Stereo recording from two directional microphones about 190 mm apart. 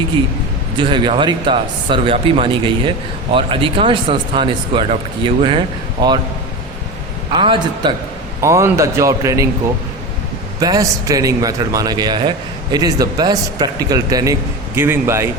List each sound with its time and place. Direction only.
0.8 s speech: 25° right (ahead or behind)
7.3 s speech: 25° right (ahead or behind)
8.4 s a man's voice: 15° right (ahead or behind)
10.6 s a man's voice: 20° right (ahead or behind)